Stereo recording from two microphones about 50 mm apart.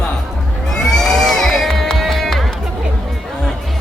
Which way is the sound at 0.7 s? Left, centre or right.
Centre.